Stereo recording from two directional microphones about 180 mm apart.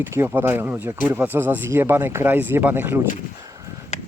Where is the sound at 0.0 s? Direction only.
10° right (ahead or behind).